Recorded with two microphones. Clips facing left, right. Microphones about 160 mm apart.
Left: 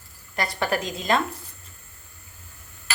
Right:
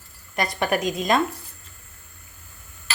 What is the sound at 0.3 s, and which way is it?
Speech, 20° right (ahead or behind).